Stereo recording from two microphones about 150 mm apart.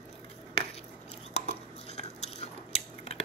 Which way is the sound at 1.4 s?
45° left (ahead or behind).